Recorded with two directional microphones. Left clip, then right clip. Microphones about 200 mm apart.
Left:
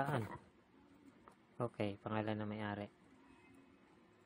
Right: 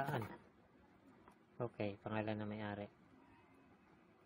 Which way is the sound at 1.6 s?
20° left (ahead or behind).